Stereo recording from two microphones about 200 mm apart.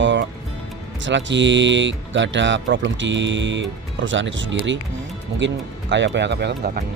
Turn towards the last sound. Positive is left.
turn(degrees=-55)  # may be behind; listen again after turning